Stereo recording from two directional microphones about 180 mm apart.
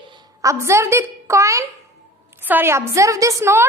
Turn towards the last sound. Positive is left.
turn(degrees=-15)  # may be behind; listen again after turning